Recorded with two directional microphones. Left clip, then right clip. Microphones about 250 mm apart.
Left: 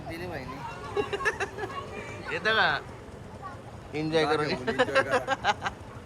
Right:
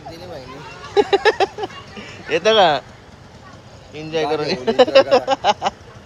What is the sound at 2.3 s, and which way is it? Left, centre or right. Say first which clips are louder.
Speech: right 11 dB; centre.